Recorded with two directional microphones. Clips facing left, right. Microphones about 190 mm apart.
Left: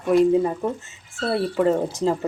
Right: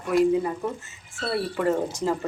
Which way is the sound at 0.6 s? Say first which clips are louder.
Left 4 dB; 25° left (ahead or behind).